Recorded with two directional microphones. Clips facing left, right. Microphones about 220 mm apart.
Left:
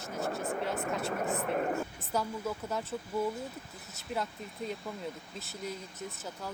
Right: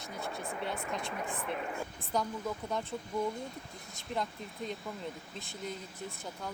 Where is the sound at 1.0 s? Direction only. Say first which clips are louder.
Left 5 dB; 45° left (ahead or behind).